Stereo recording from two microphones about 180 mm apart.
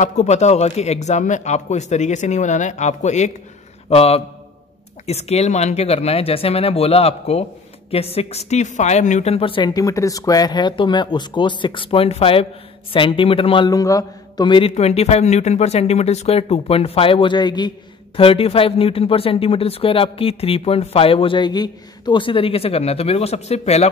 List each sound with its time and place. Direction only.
0.0 s speech: 40° left (ahead or behind)
14.7 s speech: 35° left (ahead or behind)